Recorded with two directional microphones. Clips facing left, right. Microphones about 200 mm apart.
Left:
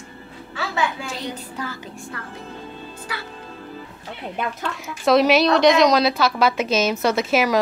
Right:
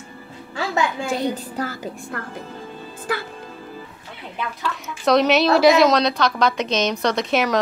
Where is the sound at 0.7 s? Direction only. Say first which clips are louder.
Right 4 dB; 50° right (ahead or behind).